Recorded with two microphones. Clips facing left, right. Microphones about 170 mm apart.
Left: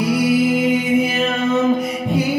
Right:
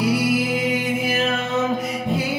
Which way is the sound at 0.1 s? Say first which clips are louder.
Left 5 dB; centre (ahead or behind).